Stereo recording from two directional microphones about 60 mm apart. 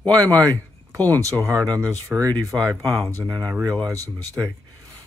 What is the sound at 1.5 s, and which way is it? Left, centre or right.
Speech, right.